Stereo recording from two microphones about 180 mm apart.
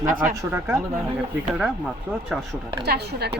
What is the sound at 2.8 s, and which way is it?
Speech, 65° right (ahead or behind).